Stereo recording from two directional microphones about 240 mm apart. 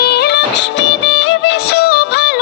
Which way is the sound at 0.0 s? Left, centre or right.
Left.